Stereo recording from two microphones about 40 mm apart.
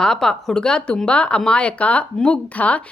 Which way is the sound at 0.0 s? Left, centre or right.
Centre.